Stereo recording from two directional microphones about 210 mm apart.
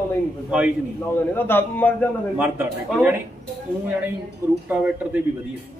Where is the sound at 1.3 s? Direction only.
10° left (ahead or behind).